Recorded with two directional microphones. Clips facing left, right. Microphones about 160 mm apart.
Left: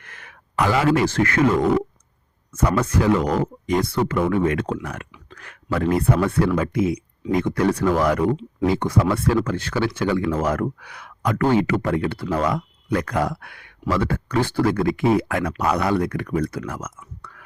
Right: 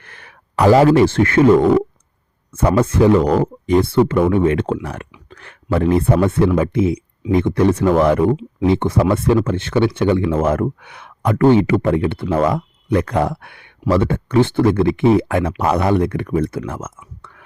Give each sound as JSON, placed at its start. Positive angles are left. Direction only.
{"t": 0.0, "sound": "speech", "side_deg": -30}